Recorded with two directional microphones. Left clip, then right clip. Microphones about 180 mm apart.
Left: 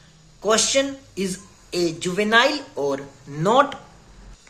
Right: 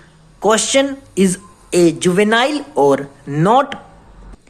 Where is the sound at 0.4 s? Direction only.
55° right (ahead or behind).